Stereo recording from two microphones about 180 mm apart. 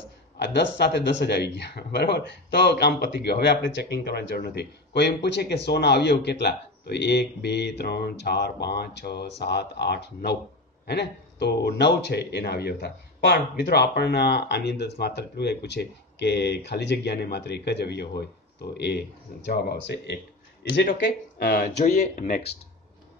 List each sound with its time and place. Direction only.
0.4 s speech: 70° left (ahead or behind)
21.7 s speech: 40° left (ahead or behind)